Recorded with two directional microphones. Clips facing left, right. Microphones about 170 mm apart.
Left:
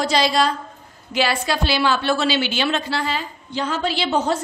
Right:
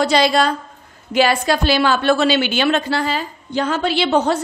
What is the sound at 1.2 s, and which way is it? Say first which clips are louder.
A woman's voice: right 5 dB; 45° right (ahead or behind).